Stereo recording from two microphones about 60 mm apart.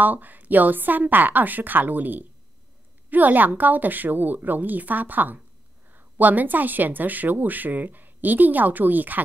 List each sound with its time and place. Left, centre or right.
0.0 s a woman's voice: right